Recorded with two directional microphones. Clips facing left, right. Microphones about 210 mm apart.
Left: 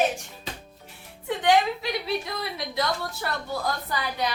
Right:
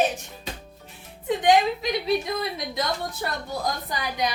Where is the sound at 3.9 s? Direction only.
15° right (ahead or behind).